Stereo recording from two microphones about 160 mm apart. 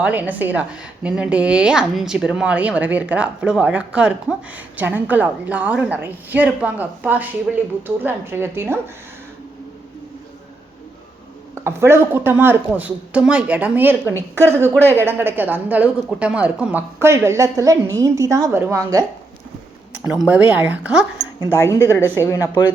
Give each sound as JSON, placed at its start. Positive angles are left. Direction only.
{"t": 0.0, "sound": "speech", "side_deg": -10}
{"t": 11.5, "sound": "speech", "side_deg": -15}
{"t": 19.9, "sound": "speech", "side_deg": -5}
{"t": 21.6, "sound": "speech", "side_deg": 20}